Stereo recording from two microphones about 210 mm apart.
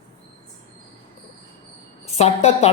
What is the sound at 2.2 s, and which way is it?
Speech, 30° left (ahead or behind).